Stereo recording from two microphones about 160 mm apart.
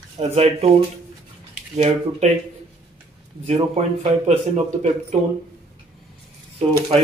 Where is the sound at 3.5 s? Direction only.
40° right (ahead or behind).